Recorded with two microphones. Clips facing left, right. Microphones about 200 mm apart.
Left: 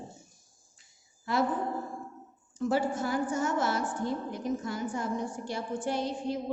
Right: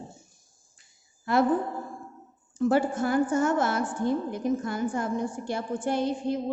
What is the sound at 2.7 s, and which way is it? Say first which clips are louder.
A woman's voice: right 4 dB; 55° right (ahead or behind).